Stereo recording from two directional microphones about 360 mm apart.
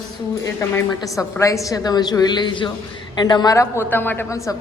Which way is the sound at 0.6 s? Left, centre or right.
Centre.